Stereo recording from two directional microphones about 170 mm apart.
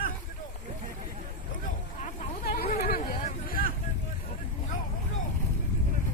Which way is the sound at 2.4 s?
60° left (ahead or behind).